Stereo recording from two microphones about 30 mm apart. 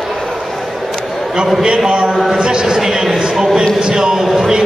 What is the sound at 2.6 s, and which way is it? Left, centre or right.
A man's voice, centre.